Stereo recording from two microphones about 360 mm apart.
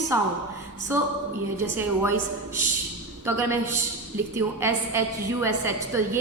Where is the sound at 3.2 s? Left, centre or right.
Centre.